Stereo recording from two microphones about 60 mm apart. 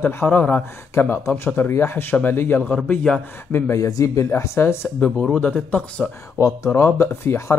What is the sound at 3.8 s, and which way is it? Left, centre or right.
Speech, left.